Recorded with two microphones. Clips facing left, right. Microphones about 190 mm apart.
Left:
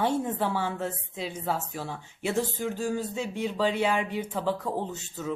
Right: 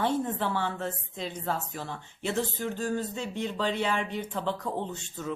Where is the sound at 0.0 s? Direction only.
10° left (ahead or behind).